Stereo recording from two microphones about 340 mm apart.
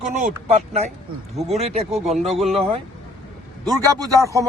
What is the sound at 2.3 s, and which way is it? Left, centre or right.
Speech, centre.